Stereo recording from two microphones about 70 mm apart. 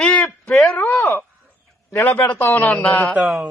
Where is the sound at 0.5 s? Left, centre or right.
Centre.